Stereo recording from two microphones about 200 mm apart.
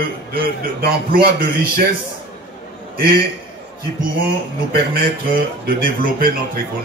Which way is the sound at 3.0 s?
50° right (ahead or behind).